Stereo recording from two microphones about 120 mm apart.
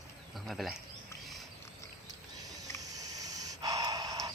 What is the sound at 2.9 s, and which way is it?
Snort, 30° right (ahead or behind).